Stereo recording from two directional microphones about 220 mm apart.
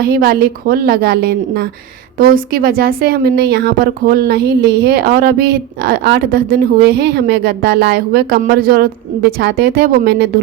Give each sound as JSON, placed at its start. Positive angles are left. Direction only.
{"t": 0.0, "sound": "speech", "side_deg": -45}